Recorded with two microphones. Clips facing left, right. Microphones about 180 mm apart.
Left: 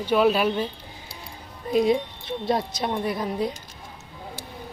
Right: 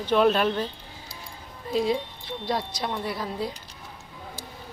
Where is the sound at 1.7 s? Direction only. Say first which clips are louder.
Left 4 dB; 20° left (ahead or behind).